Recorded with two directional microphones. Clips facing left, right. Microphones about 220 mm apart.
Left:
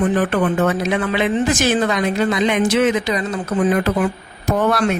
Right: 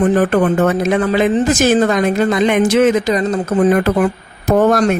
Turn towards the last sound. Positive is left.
turn(degrees=-45)  # may be behind; listen again after turning